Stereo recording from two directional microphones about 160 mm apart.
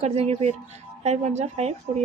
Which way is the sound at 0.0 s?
40° right (ahead or behind).